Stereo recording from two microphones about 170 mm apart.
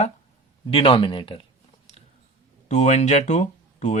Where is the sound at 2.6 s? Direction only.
40° left (ahead or behind).